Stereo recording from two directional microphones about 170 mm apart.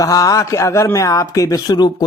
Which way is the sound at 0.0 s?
20° left (ahead or behind).